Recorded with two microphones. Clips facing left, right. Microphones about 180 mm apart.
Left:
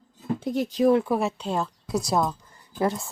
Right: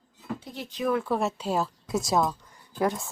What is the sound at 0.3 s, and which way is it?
Speech, 45° left (ahead or behind).